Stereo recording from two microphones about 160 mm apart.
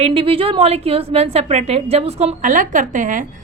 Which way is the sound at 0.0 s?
35° right (ahead or behind).